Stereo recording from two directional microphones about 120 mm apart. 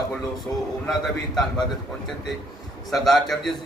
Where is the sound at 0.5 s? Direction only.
15° left (ahead or behind).